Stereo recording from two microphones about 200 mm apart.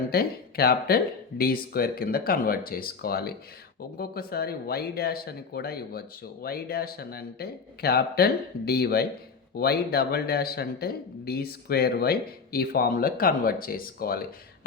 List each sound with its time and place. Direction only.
0.1 s speech: 50° left (ahead or behind)